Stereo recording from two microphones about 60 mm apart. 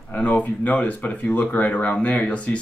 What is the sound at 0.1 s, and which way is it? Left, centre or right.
Speech, left.